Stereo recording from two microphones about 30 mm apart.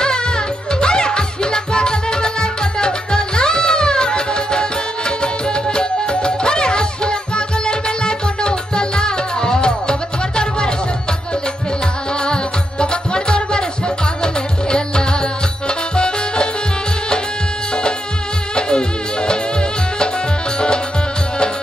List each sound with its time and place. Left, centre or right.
0.0 s music: left
12.3 s music: left
18.5 s music: left